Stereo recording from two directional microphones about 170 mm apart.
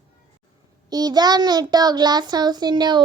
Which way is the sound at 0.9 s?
25° right (ahead or behind).